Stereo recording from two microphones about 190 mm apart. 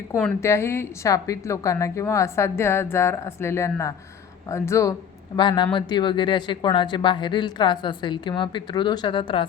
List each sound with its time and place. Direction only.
0.4 s a woman's voice: 15° left (ahead or behind)